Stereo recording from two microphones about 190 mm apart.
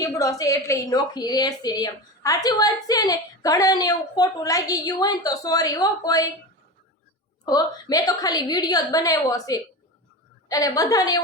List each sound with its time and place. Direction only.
0.0 s a woman's voice: 20° left (ahead or behind)
7.4 s a woman's voice: 20° left (ahead or behind)